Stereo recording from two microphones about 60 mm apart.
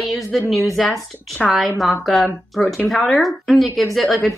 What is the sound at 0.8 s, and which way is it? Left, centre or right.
A woman's voice, centre.